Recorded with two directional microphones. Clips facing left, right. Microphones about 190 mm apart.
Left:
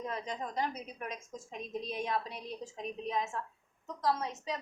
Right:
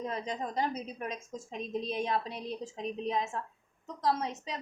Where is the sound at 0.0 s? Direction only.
30° right (ahead or behind).